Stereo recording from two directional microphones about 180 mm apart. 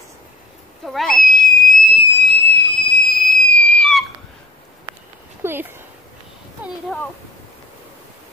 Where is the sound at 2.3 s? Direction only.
10° left (ahead or behind).